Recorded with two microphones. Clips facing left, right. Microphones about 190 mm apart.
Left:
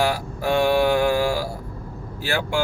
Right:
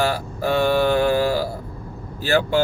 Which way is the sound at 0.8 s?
15° left (ahead or behind).